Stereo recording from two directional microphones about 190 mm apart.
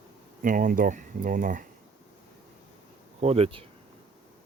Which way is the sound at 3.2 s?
30° right (ahead or behind).